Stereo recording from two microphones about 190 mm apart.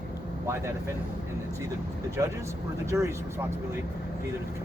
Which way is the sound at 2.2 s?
15° right (ahead or behind).